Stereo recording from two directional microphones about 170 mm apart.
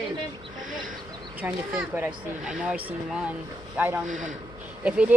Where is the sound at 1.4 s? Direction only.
10° right (ahead or behind).